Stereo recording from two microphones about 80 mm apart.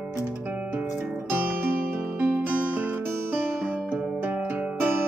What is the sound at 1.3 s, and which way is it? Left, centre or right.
Music, right.